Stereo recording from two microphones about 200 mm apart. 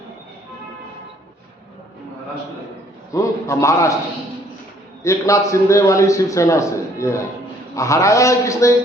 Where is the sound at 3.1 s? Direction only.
15° left (ahead or behind).